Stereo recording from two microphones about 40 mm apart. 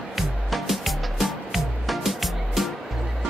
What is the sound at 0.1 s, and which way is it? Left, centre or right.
Music, centre.